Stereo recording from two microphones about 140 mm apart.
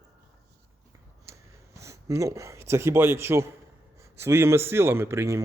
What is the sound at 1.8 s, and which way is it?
Speech, 20° right (ahead or behind).